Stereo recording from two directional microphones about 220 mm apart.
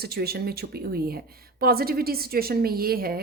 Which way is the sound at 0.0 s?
45° right (ahead or behind).